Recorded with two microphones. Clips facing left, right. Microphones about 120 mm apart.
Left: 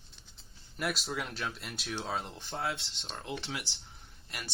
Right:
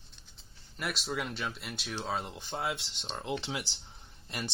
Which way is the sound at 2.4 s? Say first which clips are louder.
Right 1 dB; 15° right (ahead or behind).